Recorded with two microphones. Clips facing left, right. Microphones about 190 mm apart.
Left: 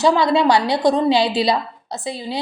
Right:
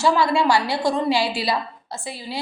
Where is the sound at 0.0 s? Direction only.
20° left (ahead or behind).